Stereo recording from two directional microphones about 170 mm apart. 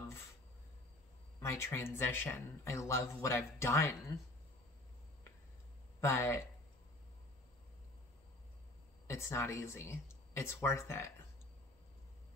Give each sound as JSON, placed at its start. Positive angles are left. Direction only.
{"t": 1.4, "sound": "speech", "side_deg": 15}
{"t": 5.9, "sound": "speech", "side_deg": 15}
{"t": 9.0, "sound": "speech", "side_deg": 15}